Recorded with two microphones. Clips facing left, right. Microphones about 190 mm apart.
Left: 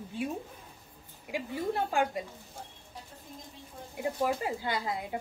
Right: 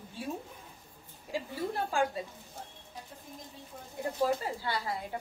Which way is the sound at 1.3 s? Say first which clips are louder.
Left 2 dB; 20° left (ahead or behind).